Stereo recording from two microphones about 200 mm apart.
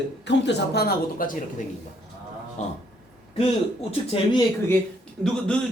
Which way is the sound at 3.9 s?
30° left (ahead or behind).